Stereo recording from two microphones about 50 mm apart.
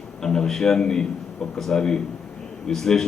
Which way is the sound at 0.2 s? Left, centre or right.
Centre.